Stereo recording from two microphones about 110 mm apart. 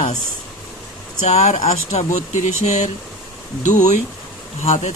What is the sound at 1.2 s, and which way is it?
Speech, 85° left.